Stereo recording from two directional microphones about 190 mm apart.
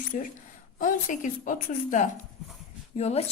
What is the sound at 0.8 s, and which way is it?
A woman's voice, 45° left (ahead or behind).